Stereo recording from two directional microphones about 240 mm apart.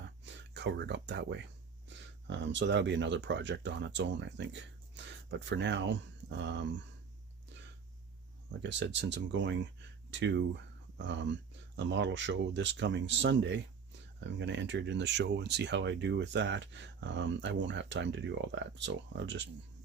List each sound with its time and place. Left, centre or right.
0.5 s speech: right
8.6 s speech: right